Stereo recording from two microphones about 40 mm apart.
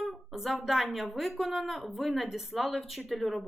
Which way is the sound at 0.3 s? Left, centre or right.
Centre.